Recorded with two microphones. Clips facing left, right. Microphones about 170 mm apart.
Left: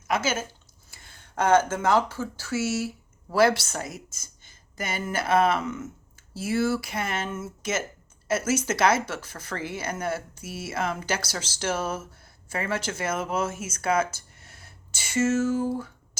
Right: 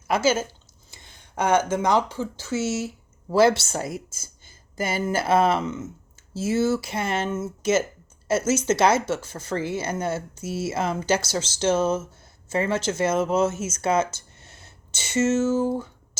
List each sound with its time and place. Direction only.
0.1 s speech: 30° right (ahead or behind)
0.9 s speech: 15° right (ahead or behind)